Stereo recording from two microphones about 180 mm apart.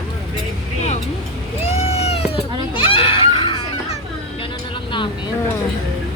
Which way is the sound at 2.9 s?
30° left (ahead or behind).